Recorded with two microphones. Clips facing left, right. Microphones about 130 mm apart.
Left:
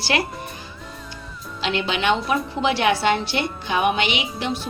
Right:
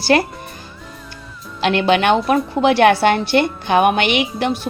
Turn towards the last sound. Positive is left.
turn(degrees=-60)  # may be behind; listen again after turning